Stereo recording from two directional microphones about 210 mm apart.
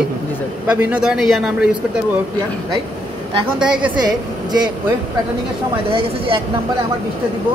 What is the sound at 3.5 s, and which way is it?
Speech, 5° right (ahead or behind).